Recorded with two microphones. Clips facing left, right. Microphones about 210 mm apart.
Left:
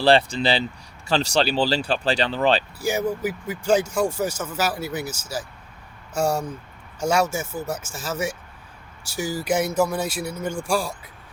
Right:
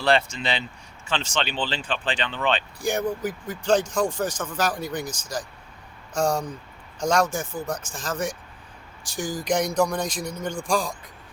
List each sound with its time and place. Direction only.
0.0 s speech: 30° left (ahead or behind)
2.8 s speech: 5° left (ahead or behind)